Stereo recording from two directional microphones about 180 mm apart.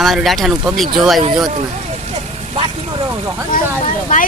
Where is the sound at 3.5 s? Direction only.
50° left (ahead or behind).